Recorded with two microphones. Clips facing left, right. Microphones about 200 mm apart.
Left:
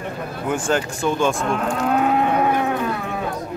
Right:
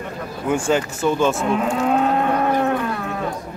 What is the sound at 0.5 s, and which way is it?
Cattle, 10° right (ahead or behind).